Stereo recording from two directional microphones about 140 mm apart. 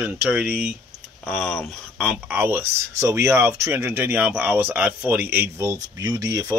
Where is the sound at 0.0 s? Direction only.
10° right (ahead or behind).